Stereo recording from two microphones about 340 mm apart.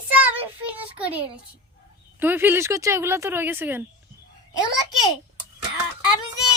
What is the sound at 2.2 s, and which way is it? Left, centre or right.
Speech, centre.